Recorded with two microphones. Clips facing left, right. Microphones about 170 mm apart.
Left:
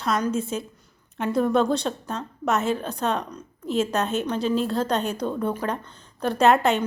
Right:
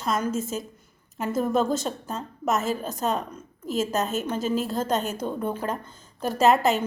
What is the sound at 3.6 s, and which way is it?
Speech, 40° right (ahead or behind).